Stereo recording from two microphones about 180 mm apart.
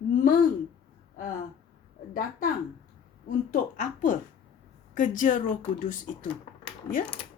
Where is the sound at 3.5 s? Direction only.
45° left (ahead or behind).